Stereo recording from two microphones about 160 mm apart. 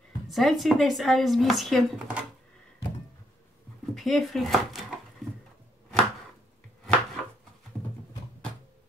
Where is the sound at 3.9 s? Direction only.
Centre (ahead or behind).